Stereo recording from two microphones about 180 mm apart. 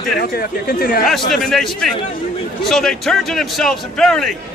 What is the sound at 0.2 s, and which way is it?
Speech, 55° left (ahead or behind).